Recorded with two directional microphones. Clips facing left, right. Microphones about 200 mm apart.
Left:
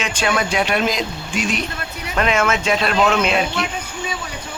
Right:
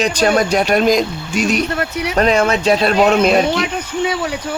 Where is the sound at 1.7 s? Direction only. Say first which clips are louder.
Right 10 dB; 70° right (ahead or behind).